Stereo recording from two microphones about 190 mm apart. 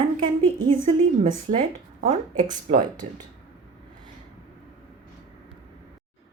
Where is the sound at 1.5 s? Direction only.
35° right (ahead or behind).